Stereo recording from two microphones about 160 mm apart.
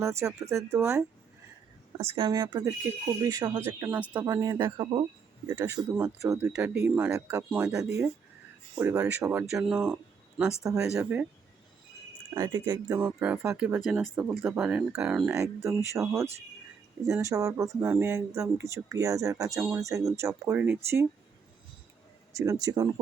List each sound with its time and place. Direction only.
0.0 s speech: 15° right (ahead or behind)
2.0 s speech: 35° right (ahead or behind); by 7.7 s 15° right (ahead or behind)
8.8 s speech: 20° right (ahead or behind)
9.3 s speech: 5° right (ahead or behind)
10.6 s speech: 20° right (ahead or behind)
12.3 s speech: 20° right (ahead or behind)
13.0 s speech: 10° right (ahead or behind)
13.8 s speech: centre (ahead or behind)
15.3 s speech: 20° right (ahead or behind)
22.4 s speech: 20° right (ahead or behind)